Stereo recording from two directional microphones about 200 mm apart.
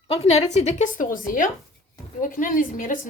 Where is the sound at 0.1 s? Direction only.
30° left (ahead or behind).